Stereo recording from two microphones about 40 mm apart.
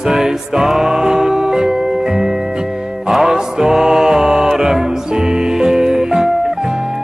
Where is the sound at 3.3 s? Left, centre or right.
Centre.